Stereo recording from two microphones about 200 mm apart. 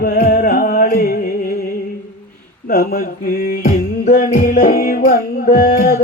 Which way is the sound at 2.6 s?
50° left (ahead or behind).